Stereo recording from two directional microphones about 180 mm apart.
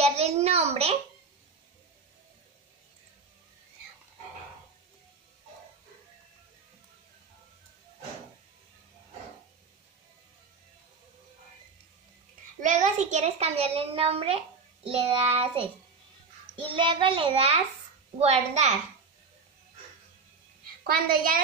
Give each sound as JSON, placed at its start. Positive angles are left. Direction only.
{"t": 0.0, "sound": "a child's voice", "side_deg": -35}
{"t": 12.5, "sound": "a child's voice", "side_deg": -45}
{"t": 16.7, "sound": "a child's voice", "side_deg": -30}
{"t": 20.8, "sound": "a woman's voice", "side_deg": -50}